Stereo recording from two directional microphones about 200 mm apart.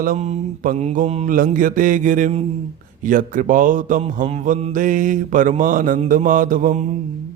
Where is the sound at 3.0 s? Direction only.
40° right (ahead or behind).